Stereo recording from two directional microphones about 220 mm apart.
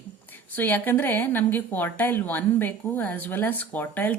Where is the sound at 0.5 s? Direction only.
10° left (ahead or behind).